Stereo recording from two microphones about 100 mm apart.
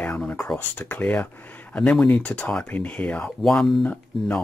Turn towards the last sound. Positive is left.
turn(degrees=10)  # may be behind; listen again after turning